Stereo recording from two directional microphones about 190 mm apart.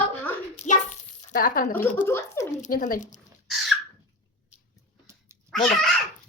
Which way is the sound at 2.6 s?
45° left (ahead or behind).